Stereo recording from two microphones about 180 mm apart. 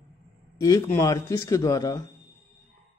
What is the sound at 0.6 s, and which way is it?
Speech, 15° left (ahead or behind).